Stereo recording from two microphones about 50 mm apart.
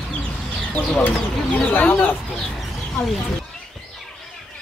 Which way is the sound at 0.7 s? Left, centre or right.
Left.